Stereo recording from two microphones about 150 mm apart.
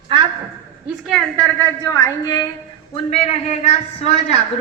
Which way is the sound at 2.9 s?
45° left (ahead or behind).